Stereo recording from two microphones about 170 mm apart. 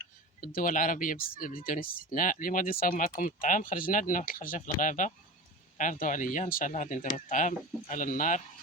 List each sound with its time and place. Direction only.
0.4 s speech: 55° left (ahead or behind)